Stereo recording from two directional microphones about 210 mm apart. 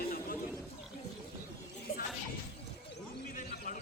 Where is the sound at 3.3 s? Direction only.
40° left (ahead or behind).